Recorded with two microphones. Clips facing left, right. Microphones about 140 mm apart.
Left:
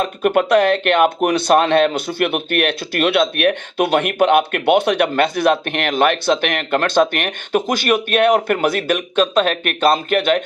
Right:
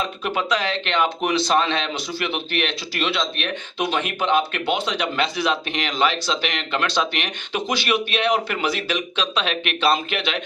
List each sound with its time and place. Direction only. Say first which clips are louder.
0.0 s speech: left 9 dB; 55° left (ahead or behind)